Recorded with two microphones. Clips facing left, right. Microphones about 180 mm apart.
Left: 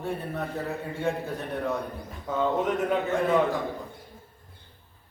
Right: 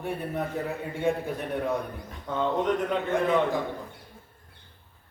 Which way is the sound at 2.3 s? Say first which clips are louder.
Even; 5° left (ahead or behind).